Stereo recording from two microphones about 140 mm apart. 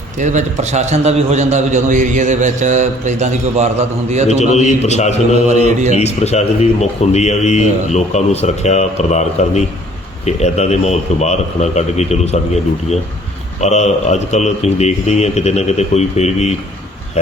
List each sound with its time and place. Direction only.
0.2 s a man's voice: 60° right (ahead or behind)
4.4 s speech: 55° left (ahead or behind)
5.6 s a man's voice: 55° right (ahead or behind)
6.0 s speech: 50° left (ahead or behind)
13.6 s speech: 55° left (ahead or behind)